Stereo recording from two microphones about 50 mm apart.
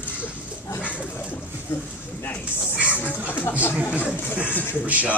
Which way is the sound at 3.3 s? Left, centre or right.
Left.